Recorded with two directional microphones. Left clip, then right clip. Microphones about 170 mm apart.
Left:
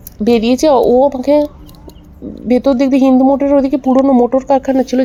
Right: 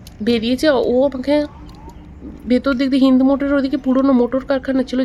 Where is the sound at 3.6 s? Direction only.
15° left (ahead or behind).